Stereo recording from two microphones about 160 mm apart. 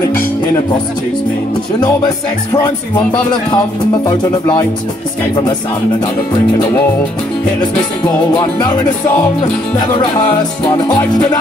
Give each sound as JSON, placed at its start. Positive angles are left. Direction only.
{"t": 3.3, "sound": "music", "side_deg": 25}
{"t": 8.3, "sound": "music", "side_deg": 30}